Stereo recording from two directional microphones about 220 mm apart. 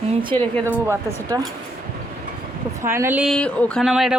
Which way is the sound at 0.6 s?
15° right (ahead or behind).